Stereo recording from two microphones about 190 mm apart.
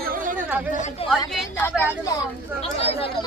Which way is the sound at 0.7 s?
40° left (ahead or behind).